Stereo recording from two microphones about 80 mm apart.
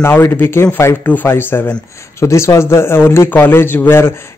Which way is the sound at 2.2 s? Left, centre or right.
Left.